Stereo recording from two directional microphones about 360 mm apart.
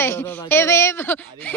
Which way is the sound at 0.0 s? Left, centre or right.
Centre.